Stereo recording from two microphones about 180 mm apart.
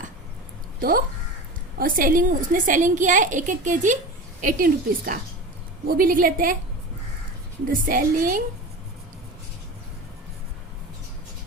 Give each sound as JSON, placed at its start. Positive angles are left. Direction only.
{"t": 0.8, "sound": "a woman's voice", "side_deg": -55}
{"t": 7.7, "sound": "a woman's voice", "side_deg": -50}